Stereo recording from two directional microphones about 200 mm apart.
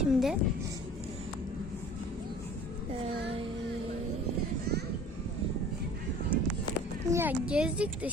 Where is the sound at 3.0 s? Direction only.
30° right (ahead or behind).